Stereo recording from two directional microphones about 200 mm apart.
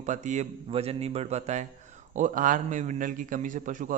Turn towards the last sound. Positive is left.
turn(degrees=-40)  # may be behind; listen again after turning